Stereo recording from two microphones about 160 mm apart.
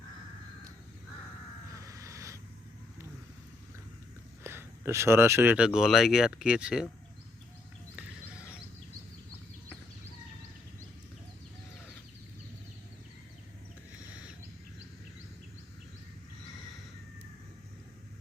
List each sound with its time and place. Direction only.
1.7 s crow: 20° right (ahead or behind)
4.4 s speech: 15° right (ahead or behind)